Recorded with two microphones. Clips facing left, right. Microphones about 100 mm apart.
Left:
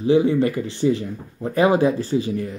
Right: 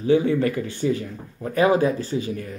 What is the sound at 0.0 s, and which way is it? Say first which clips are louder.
Speech: left 2 dB; 25° left (ahead or behind).